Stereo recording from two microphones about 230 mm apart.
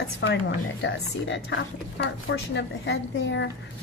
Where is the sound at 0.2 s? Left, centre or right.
Left.